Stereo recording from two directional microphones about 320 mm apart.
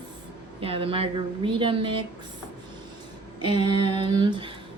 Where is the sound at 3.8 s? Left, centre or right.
Centre.